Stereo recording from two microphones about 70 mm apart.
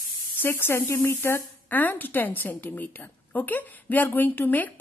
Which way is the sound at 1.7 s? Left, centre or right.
Left.